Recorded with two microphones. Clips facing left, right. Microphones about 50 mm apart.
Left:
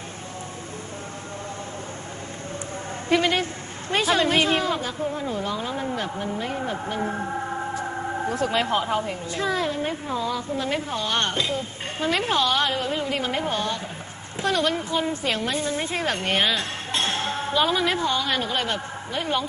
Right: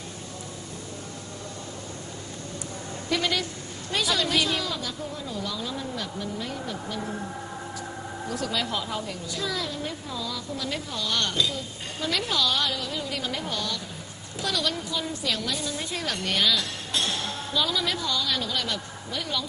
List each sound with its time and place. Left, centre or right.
3.1 s a woman's voice: left